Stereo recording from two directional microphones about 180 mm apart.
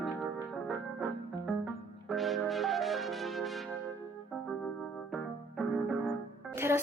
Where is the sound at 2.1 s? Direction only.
Centre (ahead or behind).